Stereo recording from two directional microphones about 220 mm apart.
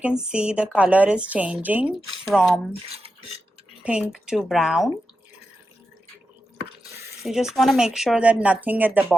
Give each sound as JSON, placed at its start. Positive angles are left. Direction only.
{"t": 0.0, "sound": "speech", "side_deg": -5}
{"t": 2.9, "sound": "speech", "side_deg": -25}
{"t": 4.0, "sound": "speech", "side_deg": 0}
{"t": 7.2, "sound": "speech", "side_deg": 0}